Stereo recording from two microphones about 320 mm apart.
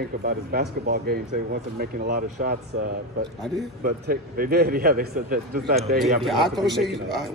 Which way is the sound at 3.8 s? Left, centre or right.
Right.